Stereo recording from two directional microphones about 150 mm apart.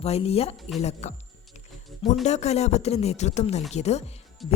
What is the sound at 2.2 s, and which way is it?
Speech, 50° left (ahead or behind).